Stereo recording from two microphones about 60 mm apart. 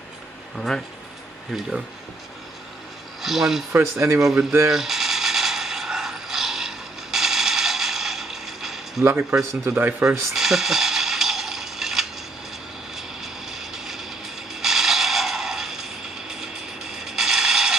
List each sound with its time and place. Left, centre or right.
0.6 s speech: centre
3.2 s speech: centre
3.7 s speech: right
4.6 s mechanisms: centre
9.3 s a man's voice: right
9.7 s speech: right
10.3 s coin: centre
12.9 s vehicle: centre